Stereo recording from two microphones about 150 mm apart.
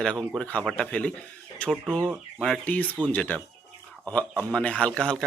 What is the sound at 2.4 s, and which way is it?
Speech, 5° left (ahead or behind).